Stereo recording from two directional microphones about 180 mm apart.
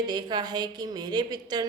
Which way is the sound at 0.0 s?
25° right (ahead or behind).